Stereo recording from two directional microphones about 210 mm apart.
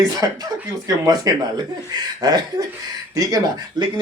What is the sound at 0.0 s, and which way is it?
Speech, 15° right (ahead or behind).